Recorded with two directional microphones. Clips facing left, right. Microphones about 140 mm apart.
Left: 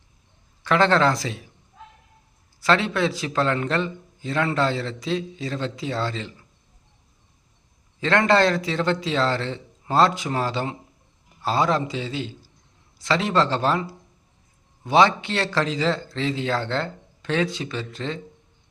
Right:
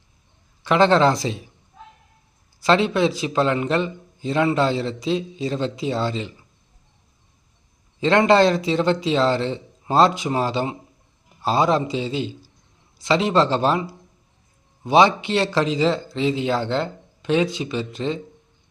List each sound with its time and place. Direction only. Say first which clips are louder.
0.6 s speech: right 3 dB; 20° right (ahead or behind)
2.6 s a man's voice: right 3 dB; 20° right (ahead or behind)
8.0 s speech: right 3 dB; 20° right (ahead or behind)
14.8 s a man's voice: right 2 dB; 15° right (ahead or behind)